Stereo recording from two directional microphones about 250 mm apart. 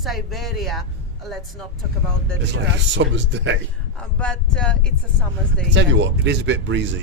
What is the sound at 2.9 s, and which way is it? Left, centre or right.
Speech, right.